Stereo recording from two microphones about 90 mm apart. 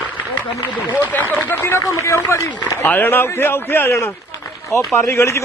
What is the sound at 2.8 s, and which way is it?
A man's voice, 20° left (ahead or behind).